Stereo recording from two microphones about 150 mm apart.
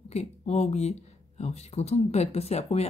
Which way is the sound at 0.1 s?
45° left (ahead or behind).